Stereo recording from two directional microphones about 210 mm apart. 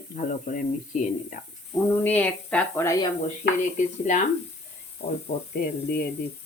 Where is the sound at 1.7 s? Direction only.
10° left (ahead or behind).